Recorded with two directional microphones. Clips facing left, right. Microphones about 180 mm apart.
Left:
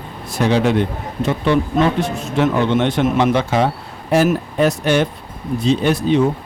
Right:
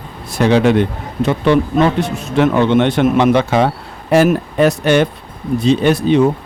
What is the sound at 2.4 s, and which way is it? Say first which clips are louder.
Speech: right 4 dB; 65° right (ahead or behind).